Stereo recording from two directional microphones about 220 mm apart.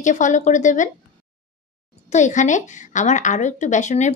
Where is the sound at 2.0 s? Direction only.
35° left (ahead or behind).